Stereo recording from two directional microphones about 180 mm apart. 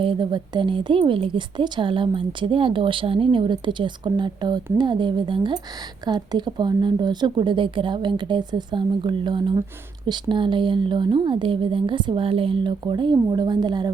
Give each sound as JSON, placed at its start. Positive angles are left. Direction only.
{"t": 0.0, "sound": "a woman's voice", "side_deg": -30}